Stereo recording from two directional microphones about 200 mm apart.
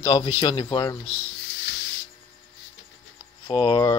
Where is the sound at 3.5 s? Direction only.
20° left (ahead or behind).